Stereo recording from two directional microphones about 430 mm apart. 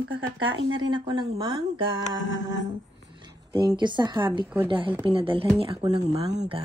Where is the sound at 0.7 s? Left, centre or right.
Centre.